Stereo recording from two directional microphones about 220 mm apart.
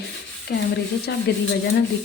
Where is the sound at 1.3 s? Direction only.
50° left (ahead or behind).